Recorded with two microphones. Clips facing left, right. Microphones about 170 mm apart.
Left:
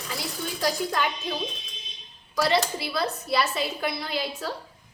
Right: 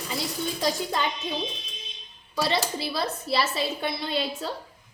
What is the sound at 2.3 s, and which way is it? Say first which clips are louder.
A woman's voice: left 2 dB; 25° right (ahead or behind).